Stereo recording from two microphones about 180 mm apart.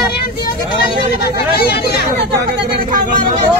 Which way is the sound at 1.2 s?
65° left (ahead or behind).